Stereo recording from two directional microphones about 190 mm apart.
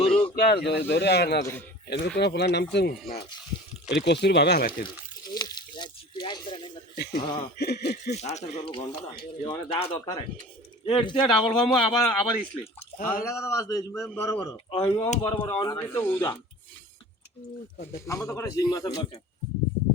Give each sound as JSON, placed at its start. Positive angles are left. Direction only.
{"t": 0.1, "sound": "a sound", "side_deg": 5}
{"t": 0.3, "sound": "speech", "side_deg": 55}
{"t": 5.3, "sound": "a sound", "side_deg": 25}
{"t": 6.9, "sound": "a sound", "side_deg": 55}
{"t": 7.2, "sound": "a man's voice", "side_deg": 25}
{"t": 7.6, "sound": "speech", "side_deg": 60}
{"t": 8.1, "sound": "a man's voice", "side_deg": 35}
{"t": 13.0, "sound": "speech", "side_deg": 50}
{"t": 13.2, "sound": "speech", "side_deg": 15}
{"t": 14.0, "sound": "a man's voice", "side_deg": 0}
{"t": 14.3, "sound": "a man's voice", "side_deg": 15}
{"t": 15.8, "sound": "speech", "side_deg": 10}
{"t": 17.9, "sound": "speech", "side_deg": 15}